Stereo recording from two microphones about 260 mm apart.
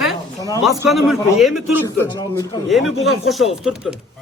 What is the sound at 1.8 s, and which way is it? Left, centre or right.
Speech, centre.